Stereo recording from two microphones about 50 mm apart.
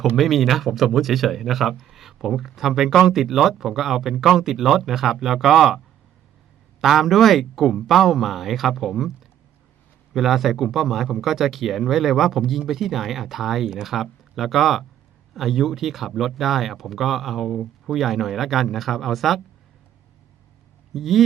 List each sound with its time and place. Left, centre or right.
0.2 s speech: centre
6.8 s speech: centre
20.9 s speech: centre